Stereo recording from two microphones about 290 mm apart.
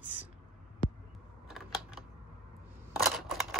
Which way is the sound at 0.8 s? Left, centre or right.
Left.